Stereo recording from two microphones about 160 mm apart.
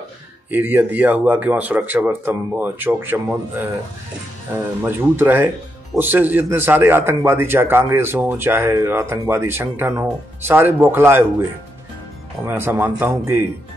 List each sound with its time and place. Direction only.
0.5 s a man's voice: 10° right (ahead or behind)
12.4 s a man's voice: 15° right (ahead or behind)